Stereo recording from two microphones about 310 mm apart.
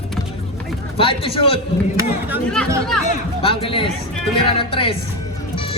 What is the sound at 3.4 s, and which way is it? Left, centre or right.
A man's voice, centre.